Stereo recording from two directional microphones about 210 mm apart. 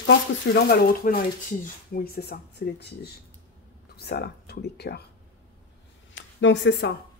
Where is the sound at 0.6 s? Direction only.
45° left (ahead or behind).